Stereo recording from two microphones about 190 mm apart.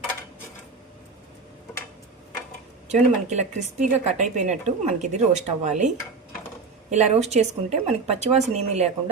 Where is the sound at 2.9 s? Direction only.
35° right (ahead or behind).